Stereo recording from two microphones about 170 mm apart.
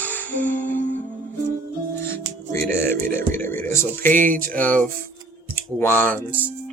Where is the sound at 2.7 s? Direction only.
15° left (ahead or behind).